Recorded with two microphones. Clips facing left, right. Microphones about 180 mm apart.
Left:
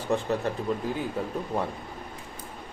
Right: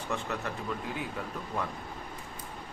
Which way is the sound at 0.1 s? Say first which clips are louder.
Left 8 dB; 35° left (ahead or behind).